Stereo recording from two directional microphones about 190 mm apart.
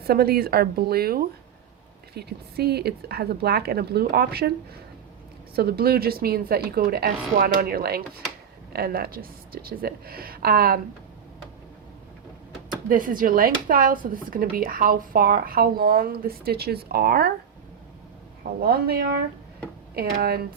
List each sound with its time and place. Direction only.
0.1 s speech: 55° right (ahead or behind)
5.5 s speech: 55° right (ahead or behind)
12.9 s speech: 45° right (ahead or behind)
18.6 s speech: 55° right (ahead or behind)
20.0 s speech: 55° right (ahead or behind)